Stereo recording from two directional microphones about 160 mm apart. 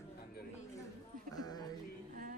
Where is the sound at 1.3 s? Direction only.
25° left (ahead or behind).